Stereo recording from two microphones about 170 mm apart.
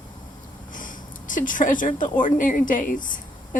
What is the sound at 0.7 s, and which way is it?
Speech, 50° left (ahead or behind).